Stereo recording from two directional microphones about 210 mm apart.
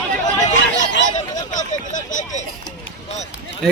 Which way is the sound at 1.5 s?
35° left (ahead or behind).